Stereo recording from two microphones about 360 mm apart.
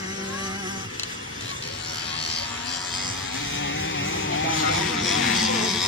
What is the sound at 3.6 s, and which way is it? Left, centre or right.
Vehicle, left.